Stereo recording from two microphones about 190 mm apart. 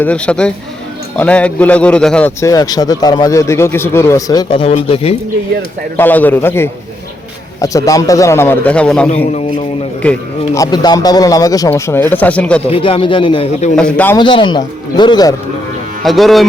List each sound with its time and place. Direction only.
0.0 s a man's voice: 5° left (ahead or behind); by 5.1 s 30° left (ahead or behind)
6.0 s a man's voice: 10° left (ahead or behind)
10.6 s a man's voice: 20° left (ahead or behind)
12.6 s speech: 30° left (ahead or behind)
13.7 s a man's voice: 5° left (ahead or behind)
14.2 s speech: 25° left (ahead or behind)
16.0 s speech: centre (ahead or behind)